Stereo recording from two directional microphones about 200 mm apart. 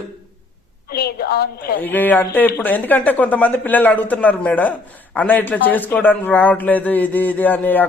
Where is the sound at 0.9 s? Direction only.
50° left (ahead or behind).